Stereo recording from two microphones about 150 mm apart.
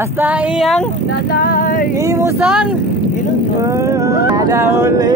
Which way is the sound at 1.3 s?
80° left.